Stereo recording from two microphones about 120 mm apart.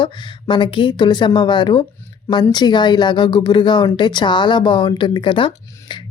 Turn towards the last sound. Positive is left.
turn(degrees=45)  # may be behind; listen again after turning